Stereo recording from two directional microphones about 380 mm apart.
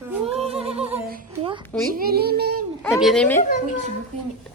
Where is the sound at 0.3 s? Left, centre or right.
Centre.